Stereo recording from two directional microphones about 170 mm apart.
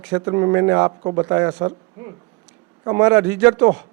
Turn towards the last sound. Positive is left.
turn(degrees=-10)  # may be behind; listen again after turning